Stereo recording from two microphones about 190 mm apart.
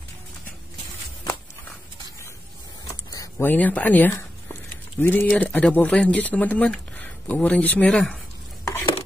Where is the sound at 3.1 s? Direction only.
15° left (ahead or behind).